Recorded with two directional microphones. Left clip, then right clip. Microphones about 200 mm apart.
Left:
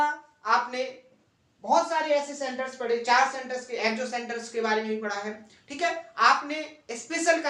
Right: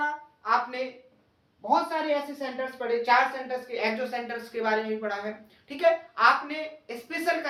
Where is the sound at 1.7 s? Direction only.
15° left (ahead or behind).